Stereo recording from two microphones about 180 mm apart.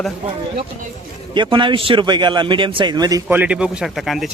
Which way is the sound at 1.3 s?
25° right (ahead or behind).